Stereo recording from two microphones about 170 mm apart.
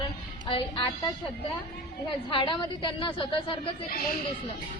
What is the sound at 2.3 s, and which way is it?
A woman's voice, 30° left (ahead or behind).